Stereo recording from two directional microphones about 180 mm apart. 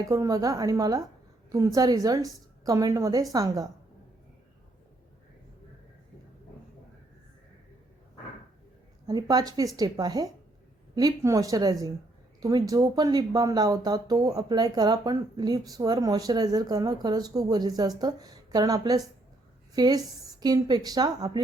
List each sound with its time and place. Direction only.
0.1 s speech: 20° right (ahead or behind)
9.0 s speech: 20° right (ahead or behind)